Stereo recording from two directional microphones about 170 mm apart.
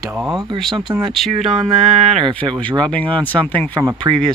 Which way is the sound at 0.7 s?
25° right (ahead or behind).